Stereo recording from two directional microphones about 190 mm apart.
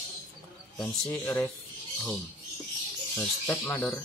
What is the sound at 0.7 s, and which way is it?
Speech, 5° left (ahead or behind).